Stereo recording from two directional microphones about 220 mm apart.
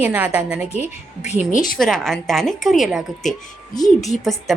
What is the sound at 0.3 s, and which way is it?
Speech, 5° right (ahead or behind).